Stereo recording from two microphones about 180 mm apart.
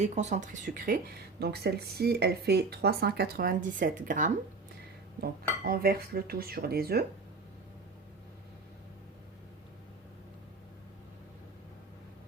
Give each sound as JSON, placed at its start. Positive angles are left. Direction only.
{"t": 0.0, "sound": "speech", "side_deg": -40}
{"t": 1.4, "sound": "speech", "side_deg": -65}
{"t": 5.6, "sound": "speech", "side_deg": -55}